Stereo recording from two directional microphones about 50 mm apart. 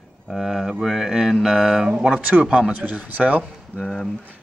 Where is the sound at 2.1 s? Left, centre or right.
Right.